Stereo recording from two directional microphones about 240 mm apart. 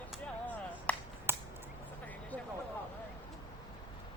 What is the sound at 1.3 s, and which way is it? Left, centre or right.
Finger snapping, centre.